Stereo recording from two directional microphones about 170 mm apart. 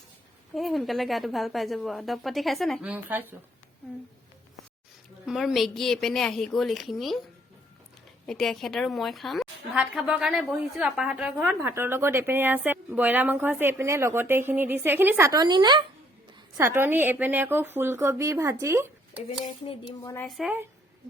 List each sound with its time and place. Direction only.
0.5 s a woman's voice: centre (ahead or behind)
2.9 s a woman's voice: 10° right (ahead or behind)
5.2 s a woman's voice: 5° right (ahead or behind)
8.3 s a woman's voice: centre (ahead or behind); by 15.8 s 25° right (ahead or behind)
16.6 s a woman's voice: 15° right (ahead or behind)
20.0 s speech: 15° left (ahead or behind)
20.2 s a woman's voice: centre (ahead or behind)